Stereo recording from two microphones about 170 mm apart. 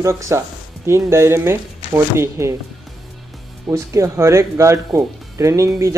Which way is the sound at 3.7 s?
15° right (ahead or behind).